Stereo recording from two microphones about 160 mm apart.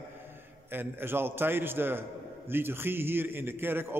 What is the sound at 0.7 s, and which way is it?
A man's voice, 15° right (ahead or behind).